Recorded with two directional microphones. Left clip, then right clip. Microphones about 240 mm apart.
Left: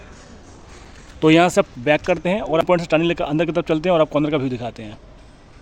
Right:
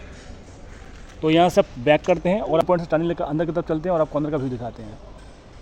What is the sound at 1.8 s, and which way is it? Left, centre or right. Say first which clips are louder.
Speech: even; centre.